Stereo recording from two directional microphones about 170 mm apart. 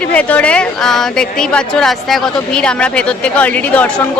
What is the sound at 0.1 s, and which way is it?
Speech, 10° left (ahead or behind).